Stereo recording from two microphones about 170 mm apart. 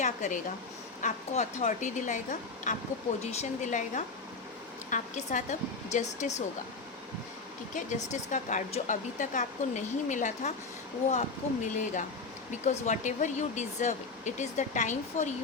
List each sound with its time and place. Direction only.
0.0 s speech: 45° left (ahead or behind)
7.7 s speech: 45° left (ahead or behind)